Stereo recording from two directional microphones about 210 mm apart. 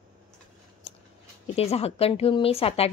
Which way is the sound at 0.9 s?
25° left (ahead or behind).